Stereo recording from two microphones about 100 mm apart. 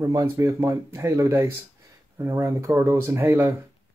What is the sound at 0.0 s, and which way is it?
Speech, 30° right (ahead or behind).